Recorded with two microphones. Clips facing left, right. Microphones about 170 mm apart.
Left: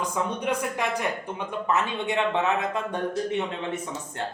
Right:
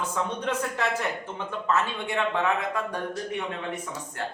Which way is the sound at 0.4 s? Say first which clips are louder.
Left 1 dB; 15° left (ahead or behind).